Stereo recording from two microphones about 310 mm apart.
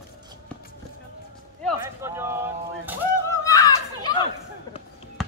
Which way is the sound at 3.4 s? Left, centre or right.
Centre.